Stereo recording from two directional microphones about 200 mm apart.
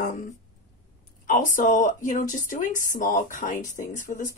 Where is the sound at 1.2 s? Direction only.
40° left (ahead or behind).